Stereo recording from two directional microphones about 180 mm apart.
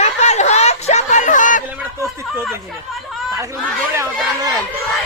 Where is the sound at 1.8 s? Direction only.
10° right (ahead or behind).